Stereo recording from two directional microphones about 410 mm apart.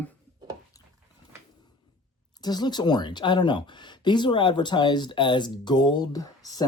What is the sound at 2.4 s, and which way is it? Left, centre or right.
Speech, centre.